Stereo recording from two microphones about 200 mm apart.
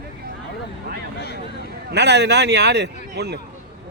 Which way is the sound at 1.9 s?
60° right (ahead or behind).